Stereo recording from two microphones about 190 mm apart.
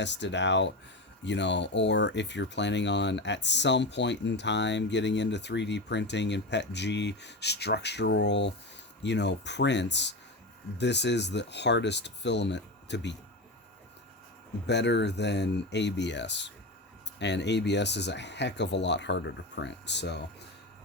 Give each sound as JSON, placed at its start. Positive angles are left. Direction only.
{"t": 0.0, "sound": "speech", "side_deg": 70}
{"t": 14.7, "sound": "speech", "side_deg": 65}